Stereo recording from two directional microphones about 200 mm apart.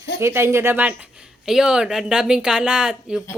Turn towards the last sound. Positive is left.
turn(degrees=-5)  # may be behind; listen again after turning